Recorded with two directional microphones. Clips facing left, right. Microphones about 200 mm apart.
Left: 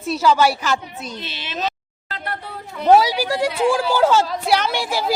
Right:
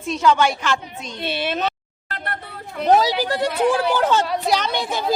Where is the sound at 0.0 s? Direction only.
5° left (ahead or behind).